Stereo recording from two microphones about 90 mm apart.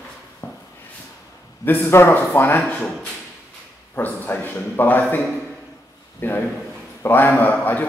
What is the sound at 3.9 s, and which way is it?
A man's voice, 20° left (ahead or behind).